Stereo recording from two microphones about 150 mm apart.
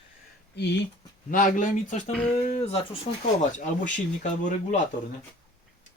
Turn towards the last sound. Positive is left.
turn(degrees=55)  # may be behind; listen again after turning